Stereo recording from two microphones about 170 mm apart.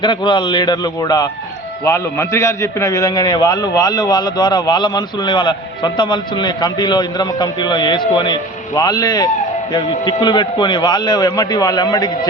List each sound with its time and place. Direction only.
0.0 s a man's voice: 30° left (ahead or behind)